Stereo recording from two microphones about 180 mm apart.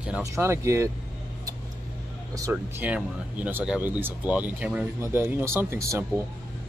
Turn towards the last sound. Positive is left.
turn(degrees=-15)  # may be behind; listen again after turning